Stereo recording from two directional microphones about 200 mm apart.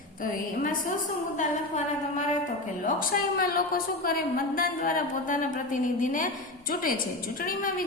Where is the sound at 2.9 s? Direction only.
45° left (ahead or behind).